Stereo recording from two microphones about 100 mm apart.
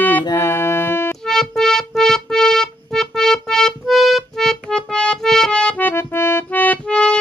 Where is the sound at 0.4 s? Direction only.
25° left (ahead or behind).